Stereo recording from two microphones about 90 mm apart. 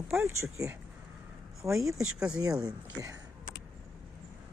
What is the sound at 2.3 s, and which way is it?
Speech, 40° right (ahead or behind).